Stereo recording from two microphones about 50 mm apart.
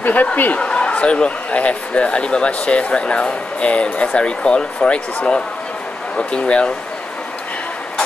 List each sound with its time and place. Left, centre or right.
0.0 s speech: left